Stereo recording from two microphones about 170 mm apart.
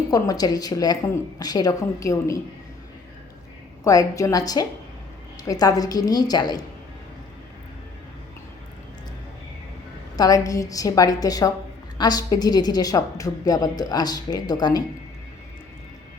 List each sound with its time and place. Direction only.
0.1 s a woman's voice: 20° left (ahead or behind)
3.8 s a woman's voice: 20° left (ahead or behind)
10.2 s a woman's voice: 20° left (ahead or behind)